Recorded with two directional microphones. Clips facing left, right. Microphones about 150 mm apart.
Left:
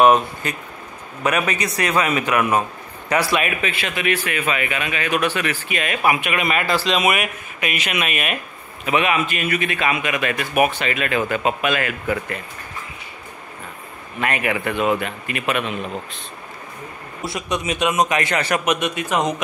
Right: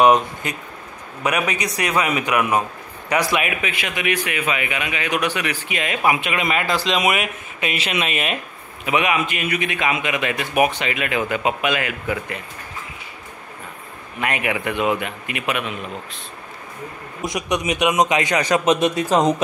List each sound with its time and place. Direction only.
0.0 s speech: 20° right (ahead or behind)
14.2 s speech: 15° right (ahead or behind)
17.2 s speech: 15° right (ahead or behind)
18.7 s speech: 35° right (ahead or behind)